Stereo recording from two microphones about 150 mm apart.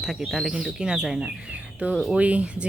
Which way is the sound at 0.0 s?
Centre (ahead or behind).